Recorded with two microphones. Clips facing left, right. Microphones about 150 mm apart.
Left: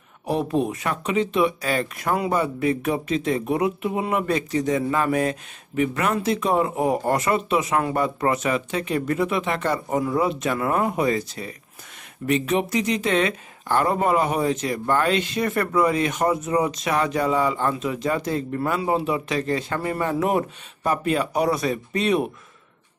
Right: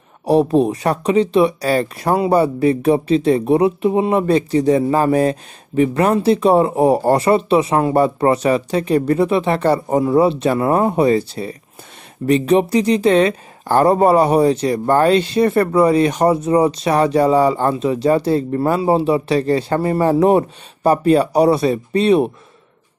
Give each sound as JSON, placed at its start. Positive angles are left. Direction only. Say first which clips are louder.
{"t": 0.2, "sound": "speech", "louder": "right 9 dB", "side_deg": -35}